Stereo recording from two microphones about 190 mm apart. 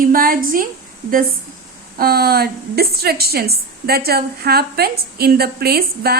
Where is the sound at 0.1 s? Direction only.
50° right (ahead or behind).